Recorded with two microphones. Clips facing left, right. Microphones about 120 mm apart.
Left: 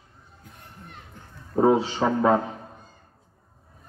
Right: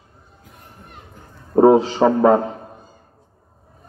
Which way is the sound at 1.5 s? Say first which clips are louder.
Right 8 dB; 40° right (ahead or behind).